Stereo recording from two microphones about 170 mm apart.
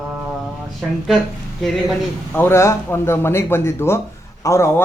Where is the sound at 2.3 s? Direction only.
15° left (ahead or behind).